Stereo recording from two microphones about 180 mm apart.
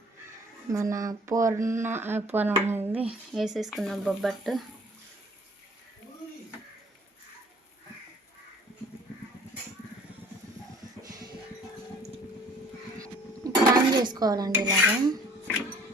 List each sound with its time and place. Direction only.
0.7 s speech: 20° right (ahead or behind); by 4.6 s centre (ahead or behind)
13.4 s a sound: 20° right (ahead or behind)
13.9 s dishes: 25° right (ahead or behind)
14.6 s cutlery: 20° right (ahead or behind)